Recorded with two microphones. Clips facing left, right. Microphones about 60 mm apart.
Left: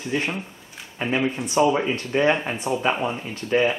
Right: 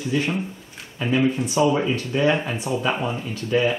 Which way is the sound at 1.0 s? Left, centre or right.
Left.